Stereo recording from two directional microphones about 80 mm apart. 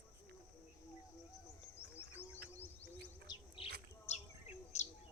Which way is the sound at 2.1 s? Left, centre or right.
Left.